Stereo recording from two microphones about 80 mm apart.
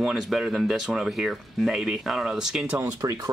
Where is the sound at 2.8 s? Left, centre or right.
Right.